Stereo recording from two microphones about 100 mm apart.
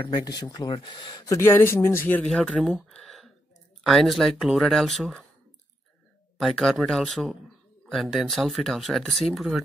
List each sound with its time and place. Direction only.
0.0 s speech: 40° left (ahead or behind)
1.4 s speech: 25° left (ahead or behind)
2.2 s speech: 5° left (ahead or behind)
2.9 s a sound: 5° left (ahead or behind)
3.8 s speech: centre (ahead or behind)
6.4 s speech: 5° left (ahead or behind)